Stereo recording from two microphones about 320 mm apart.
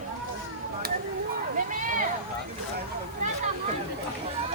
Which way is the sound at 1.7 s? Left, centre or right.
Right.